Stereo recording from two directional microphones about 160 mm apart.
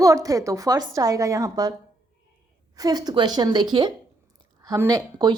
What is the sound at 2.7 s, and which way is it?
Speech, 25° right (ahead or behind).